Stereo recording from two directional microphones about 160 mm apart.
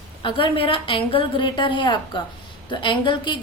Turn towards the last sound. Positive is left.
turn(degrees=30)  # may be behind; listen again after turning